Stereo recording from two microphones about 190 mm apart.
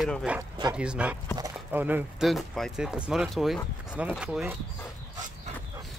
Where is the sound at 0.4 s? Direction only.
20° right (ahead or behind).